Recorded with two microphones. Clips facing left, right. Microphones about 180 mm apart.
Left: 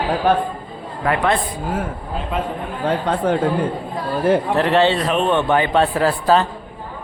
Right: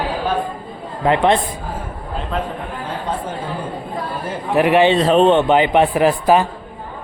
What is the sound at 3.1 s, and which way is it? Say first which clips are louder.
Speech: left 3 dB; 70° left (ahead or behind).